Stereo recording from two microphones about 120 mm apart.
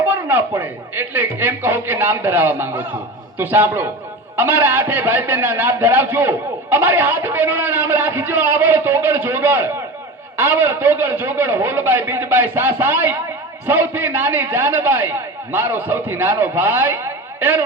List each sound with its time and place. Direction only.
0.0 s a man's voice: 15° right (ahead or behind)